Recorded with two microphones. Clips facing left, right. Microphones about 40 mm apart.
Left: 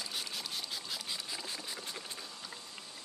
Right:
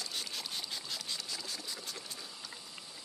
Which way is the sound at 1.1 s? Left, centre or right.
Centre.